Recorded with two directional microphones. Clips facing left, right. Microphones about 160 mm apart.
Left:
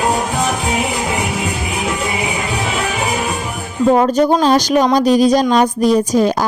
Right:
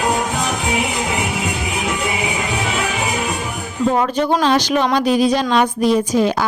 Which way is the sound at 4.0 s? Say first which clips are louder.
Left 4 dB; 40° left (ahead or behind).